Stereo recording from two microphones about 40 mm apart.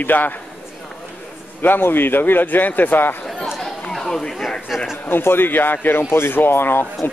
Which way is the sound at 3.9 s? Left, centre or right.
Centre.